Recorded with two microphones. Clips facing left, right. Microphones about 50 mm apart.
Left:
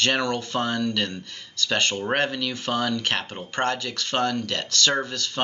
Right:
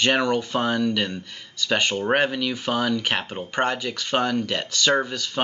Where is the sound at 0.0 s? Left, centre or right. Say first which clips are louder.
Right 3 dB; centre.